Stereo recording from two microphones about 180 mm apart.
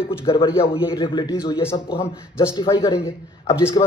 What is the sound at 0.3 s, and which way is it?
A man's voice, 30° left (ahead or behind).